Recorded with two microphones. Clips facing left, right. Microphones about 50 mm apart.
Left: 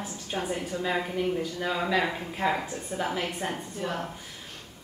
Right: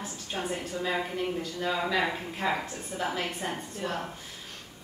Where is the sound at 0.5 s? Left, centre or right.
Centre.